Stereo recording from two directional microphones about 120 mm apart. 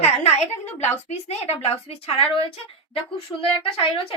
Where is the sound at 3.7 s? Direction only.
50° left (ahead or behind).